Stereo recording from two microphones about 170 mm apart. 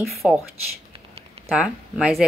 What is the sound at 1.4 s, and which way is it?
Speech, centre (ahead or behind).